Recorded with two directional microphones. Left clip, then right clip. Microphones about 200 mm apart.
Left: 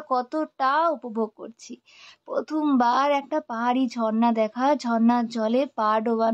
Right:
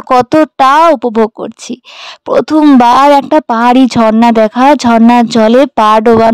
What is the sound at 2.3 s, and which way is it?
A woman's voice, 60° right (ahead or behind).